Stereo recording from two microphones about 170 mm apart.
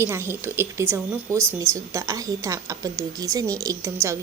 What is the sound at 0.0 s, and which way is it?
A woman's voice, 15° right (ahead or behind).